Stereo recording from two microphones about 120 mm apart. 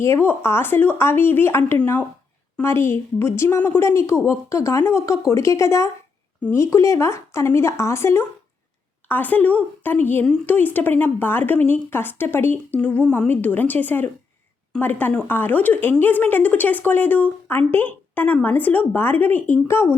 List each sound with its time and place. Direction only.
0.0 s a woman's voice: 20° left (ahead or behind)